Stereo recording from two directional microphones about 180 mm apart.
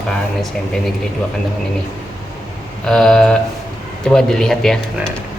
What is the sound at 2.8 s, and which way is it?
Speech, centre (ahead or behind).